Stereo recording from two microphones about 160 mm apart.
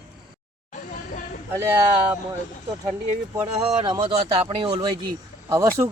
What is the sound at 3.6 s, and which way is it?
Speech, 35° right (ahead or behind).